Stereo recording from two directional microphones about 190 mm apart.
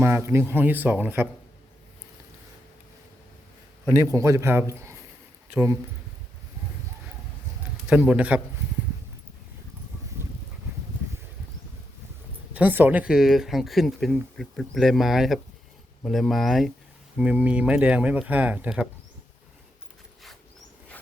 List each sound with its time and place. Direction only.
0.0 s speech: 15° right (ahead or behind)
3.8 s speech: 15° right (ahead or behind)
7.9 s speech: 5° right (ahead or behind)
12.5 s speech: 10° right (ahead or behind)